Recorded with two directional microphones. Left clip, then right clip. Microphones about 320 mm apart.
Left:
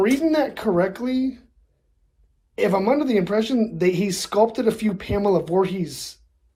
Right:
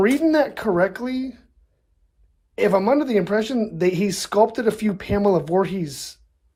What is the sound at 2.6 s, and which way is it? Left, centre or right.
Speech, centre.